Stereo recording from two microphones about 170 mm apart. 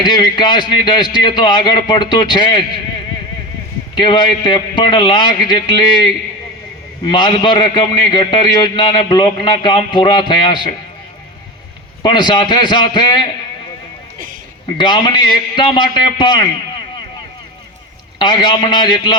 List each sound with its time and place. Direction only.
0.0 s a man's voice: 25° left (ahead or behind)
3.9 s a man's voice: 25° left (ahead or behind)
12.0 s a man's voice: 25° left (ahead or behind)
14.7 s a man's voice: 25° left (ahead or behind)
18.2 s a man's voice: 25° left (ahead or behind)